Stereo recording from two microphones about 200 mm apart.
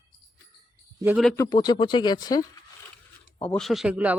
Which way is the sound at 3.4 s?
5° left (ahead or behind).